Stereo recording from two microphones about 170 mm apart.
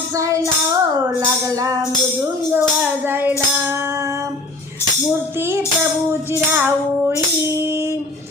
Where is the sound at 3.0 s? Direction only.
10° right (ahead or behind).